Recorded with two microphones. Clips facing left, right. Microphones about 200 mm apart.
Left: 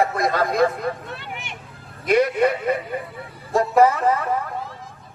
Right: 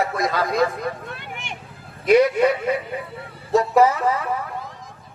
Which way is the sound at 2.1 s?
55° left (ahead or behind).